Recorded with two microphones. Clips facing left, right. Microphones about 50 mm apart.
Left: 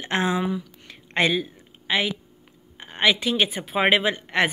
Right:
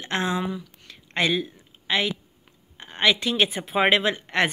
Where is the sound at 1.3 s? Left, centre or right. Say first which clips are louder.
Even; centre.